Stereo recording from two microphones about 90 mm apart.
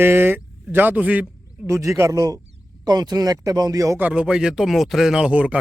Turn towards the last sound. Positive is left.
turn(degrees=-15)  # may be behind; listen again after turning